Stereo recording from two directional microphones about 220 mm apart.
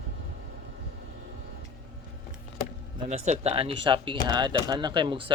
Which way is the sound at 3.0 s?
30° right (ahead or behind).